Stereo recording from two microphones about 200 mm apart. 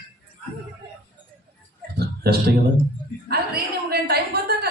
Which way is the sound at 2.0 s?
50° right (ahead or behind).